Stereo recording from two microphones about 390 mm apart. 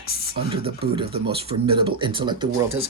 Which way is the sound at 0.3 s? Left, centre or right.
Centre.